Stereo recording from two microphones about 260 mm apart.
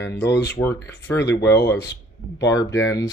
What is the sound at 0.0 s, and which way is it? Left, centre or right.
Speech, centre.